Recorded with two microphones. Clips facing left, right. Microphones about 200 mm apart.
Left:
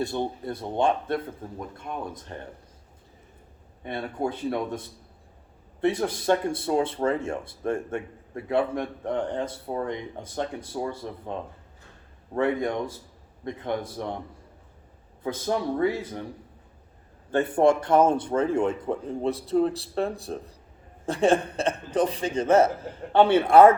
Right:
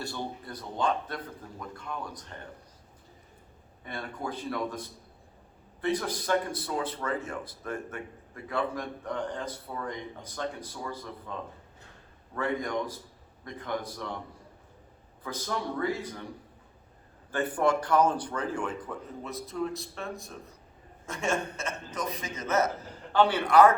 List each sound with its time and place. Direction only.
0.0 s speech: 25° left (ahead or behind)
3.8 s speech: 25° left (ahead or behind)
5.8 s a man's voice: 25° left (ahead or behind)
15.2 s speech: 25° left (ahead or behind)
17.3 s a man's voice: 25° left (ahead or behind)